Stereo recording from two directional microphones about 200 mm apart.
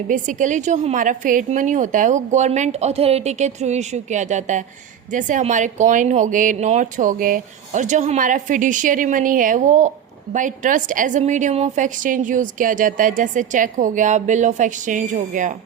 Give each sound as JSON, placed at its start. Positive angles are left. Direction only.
{"t": 0.1, "sound": "a woman's voice", "side_deg": -40}